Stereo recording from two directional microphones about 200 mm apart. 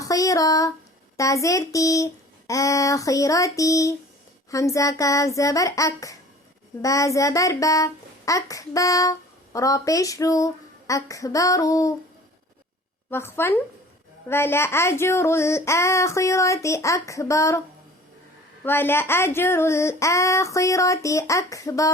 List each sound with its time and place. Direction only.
0.0 s a sound: 15° left (ahead or behind)
1.1 s a child's voice: 15° left (ahead or behind)
13.1 s a child's voice: 10° left (ahead or behind)
18.6 s a child's voice: 10° left (ahead or behind)